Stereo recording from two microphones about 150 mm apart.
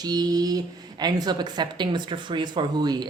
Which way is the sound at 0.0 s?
25° right (ahead or behind).